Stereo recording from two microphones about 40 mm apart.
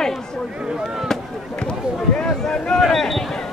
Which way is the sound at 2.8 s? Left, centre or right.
Centre.